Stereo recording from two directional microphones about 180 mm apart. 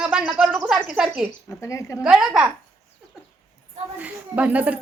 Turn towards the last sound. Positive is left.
turn(degrees=-10)  # may be behind; listen again after turning